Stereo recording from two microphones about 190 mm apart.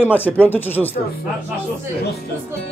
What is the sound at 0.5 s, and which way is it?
Speech, 10° left (ahead or behind).